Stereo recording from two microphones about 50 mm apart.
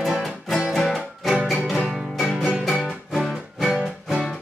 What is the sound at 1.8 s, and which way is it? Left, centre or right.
Music, centre.